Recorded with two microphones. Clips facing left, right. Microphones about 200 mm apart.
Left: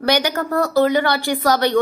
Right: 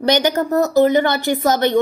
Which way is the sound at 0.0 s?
25° right (ahead or behind).